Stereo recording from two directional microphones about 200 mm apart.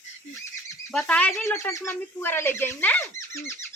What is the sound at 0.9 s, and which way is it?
Speech, 5° left (ahead or behind).